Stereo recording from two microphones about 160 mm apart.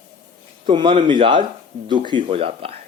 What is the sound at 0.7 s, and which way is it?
Speech, 30° right (ahead or behind).